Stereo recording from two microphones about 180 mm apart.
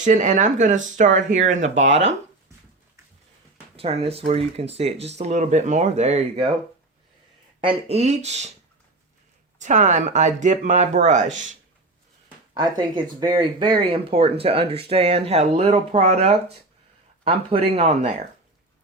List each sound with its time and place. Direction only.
0.0 s speech: 45° right (ahead or behind)
1.9 s speech: 90° right
3.8 s speech: 35° right (ahead or behind)
7.6 s speech: 30° right (ahead or behind)
9.6 s speech: 40° right (ahead or behind)
12.5 s speech: 25° right (ahead or behind)